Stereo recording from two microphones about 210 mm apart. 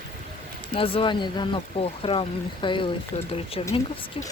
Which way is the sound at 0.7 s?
25° left (ahead or behind).